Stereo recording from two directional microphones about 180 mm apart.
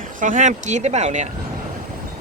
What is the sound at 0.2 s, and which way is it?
Speech, 45° right (ahead or behind).